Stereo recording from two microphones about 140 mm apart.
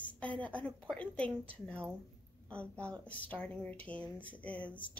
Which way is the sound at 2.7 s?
20° right (ahead or behind).